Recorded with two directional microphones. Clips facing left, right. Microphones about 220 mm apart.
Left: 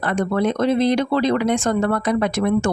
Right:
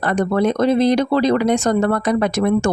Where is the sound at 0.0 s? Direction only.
40° right (ahead or behind).